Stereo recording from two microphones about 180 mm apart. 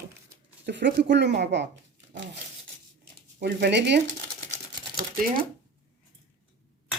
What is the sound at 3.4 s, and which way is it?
Speech, 70° right (ahead or behind).